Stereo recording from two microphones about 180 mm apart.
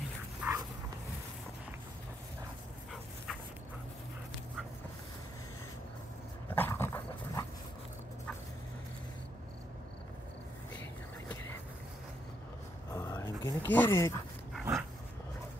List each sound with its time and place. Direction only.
0.4 s dog: 5° right (ahead or behind)
6.5 s dog: 10° left (ahead or behind)
12.9 s a sound: 15° left (ahead or behind)
13.7 s speech: 10° left (ahead or behind)
14.6 s dog: 10° right (ahead or behind)